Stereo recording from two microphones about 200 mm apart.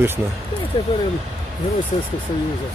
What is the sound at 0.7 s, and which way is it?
Speech, 25° left (ahead or behind).